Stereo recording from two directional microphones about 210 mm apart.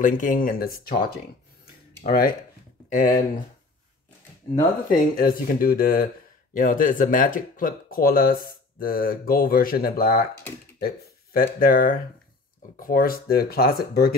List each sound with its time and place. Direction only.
0.0 s speech: 40° left (ahead or behind)
2.0 s speech: 45° left (ahead or behind)
4.8 s speech: 45° left (ahead or behind)
11.3 s speech: 40° left (ahead or behind)